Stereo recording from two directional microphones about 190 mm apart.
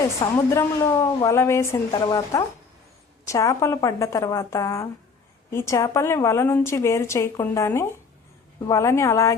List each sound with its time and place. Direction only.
0.2 s a woman's voice: 15° left (ahead or behind)